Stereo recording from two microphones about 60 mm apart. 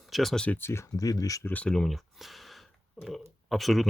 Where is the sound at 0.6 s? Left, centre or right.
Left.